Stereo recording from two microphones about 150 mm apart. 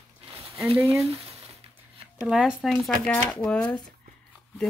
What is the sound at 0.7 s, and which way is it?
Speech, 20° right (ahead or behind).